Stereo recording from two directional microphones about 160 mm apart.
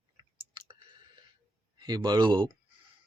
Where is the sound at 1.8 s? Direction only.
25° right (ahead or behind).